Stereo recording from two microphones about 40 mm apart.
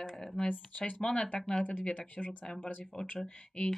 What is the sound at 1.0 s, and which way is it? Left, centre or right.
Speech, centre.